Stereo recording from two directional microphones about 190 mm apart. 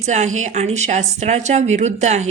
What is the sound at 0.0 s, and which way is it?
A woman's voice, 35° right (ahead or behind).